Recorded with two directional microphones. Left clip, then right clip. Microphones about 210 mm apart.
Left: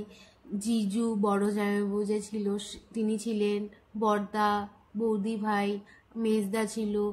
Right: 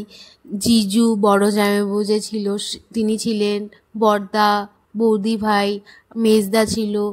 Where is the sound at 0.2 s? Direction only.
50° right (ahead or behind).